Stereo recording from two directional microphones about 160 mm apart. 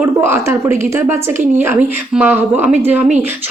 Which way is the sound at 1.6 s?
10° right (ahead or behind).